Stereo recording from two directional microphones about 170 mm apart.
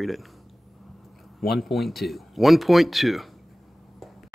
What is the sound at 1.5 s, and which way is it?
Speech, centre (ahead or behind).